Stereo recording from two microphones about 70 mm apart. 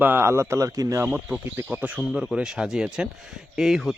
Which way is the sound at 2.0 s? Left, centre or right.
Centre.